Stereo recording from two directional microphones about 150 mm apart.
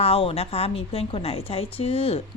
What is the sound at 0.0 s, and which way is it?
A woman's voice, 40° left (ahead or behind).